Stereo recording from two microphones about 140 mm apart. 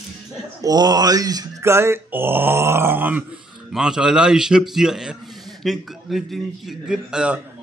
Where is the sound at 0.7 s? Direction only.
30° right (ahead or behind); by 7.3 s 5° right (ahead or behind).